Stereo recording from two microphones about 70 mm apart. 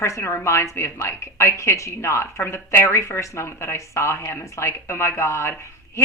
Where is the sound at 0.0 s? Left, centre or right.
Left.